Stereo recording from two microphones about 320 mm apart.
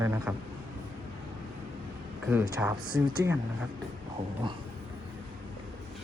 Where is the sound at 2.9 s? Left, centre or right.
Right.